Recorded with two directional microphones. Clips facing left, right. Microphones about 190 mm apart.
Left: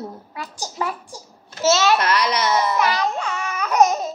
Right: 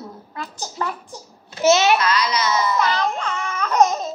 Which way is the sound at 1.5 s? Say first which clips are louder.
Right 2 dB; 15° right (ahead or behind).